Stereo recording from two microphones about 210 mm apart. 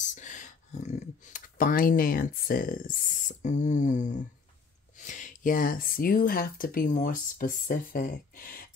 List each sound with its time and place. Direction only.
0.0 s computer keyboard: 35° left (ahead or behind)
4.9 s speech: 35° left (ahead or behind)